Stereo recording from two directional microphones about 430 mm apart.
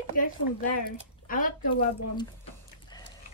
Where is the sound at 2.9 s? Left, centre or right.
Centre.